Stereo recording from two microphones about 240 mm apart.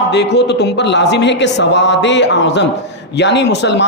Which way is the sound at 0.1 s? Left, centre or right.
Left.